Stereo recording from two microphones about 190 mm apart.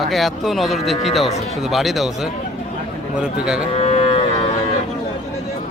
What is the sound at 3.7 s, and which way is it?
Livestock, 35° left (ahead or behind).